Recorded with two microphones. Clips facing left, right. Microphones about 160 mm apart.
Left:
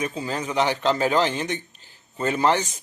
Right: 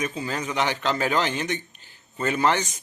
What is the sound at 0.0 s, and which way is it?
A man's voice, 30° left (ahead or behind).